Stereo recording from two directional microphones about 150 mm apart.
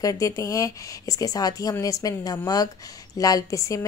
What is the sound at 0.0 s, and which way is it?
Speech, 20° left (ahead or behind).